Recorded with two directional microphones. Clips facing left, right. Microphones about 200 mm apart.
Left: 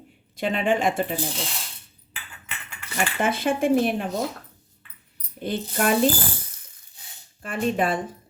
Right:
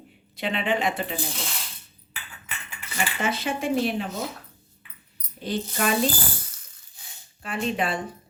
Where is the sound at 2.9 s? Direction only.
50° left (ahead or behind).